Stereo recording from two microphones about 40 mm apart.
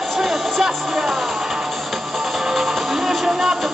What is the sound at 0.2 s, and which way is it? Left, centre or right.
Music, centre.